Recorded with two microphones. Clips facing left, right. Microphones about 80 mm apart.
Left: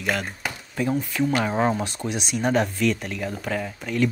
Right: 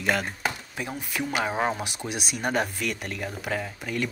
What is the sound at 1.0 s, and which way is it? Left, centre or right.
Speech, centre.